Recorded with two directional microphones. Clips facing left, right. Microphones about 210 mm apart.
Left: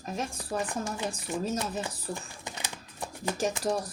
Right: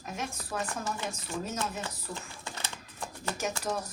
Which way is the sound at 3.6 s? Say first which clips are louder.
Left 4 dB; 30° left (ahead or behind).